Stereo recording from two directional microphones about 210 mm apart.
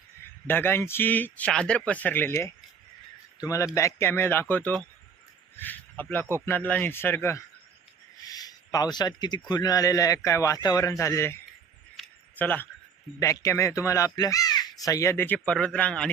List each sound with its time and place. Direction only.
0.4 s speech: 10° left (ahead or behind)
11.9 s a sound: 5° left (ahead or behind)
13.1 s speech: 15° left (ahead or behind)